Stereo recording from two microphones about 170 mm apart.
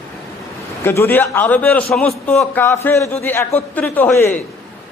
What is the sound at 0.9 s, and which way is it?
A man's voice, 10° left (ahead or behind).